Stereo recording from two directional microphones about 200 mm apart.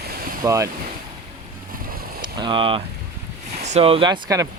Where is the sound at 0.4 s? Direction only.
15° right (ahead or behind).